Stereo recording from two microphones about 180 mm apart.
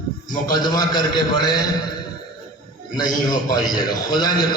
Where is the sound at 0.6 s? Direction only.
20° left (ahead or behind).